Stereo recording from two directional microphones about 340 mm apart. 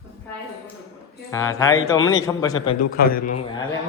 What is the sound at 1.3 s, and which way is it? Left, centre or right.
Speech, centre.